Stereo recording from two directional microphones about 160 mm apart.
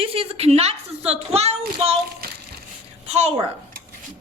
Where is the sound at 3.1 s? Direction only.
45° right (ahead or behind).